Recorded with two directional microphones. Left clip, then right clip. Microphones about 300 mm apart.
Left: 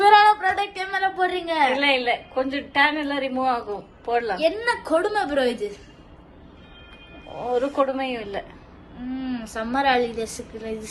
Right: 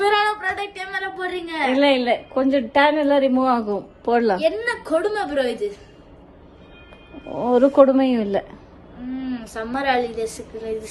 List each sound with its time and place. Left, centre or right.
0.0 s female singing: centre
0.3 s a sound: centre
1.8 s a woman's voice: right
4.4 s a woman's voice: centre
7.9 s a woman's voice: right
9.0 s a woman's voice: centre